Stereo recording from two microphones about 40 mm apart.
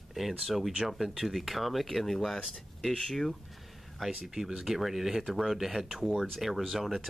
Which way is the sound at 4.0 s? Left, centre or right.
Centre.